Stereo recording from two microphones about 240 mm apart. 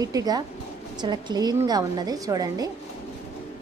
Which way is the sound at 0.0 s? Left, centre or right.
Centre.